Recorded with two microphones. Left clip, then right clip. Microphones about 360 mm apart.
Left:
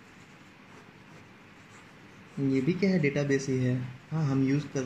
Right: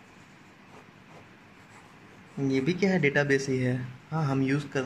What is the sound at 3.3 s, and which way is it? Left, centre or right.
Speech, right.